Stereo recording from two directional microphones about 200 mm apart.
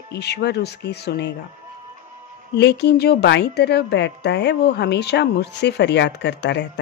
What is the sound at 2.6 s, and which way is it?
Speech, 60° left (ahead or behind).